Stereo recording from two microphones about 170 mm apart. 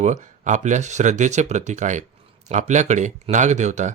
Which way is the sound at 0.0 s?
45° right (ahead or behind).